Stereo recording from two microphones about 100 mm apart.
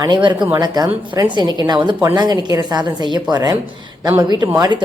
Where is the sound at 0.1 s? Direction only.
50° right (ahead or behind).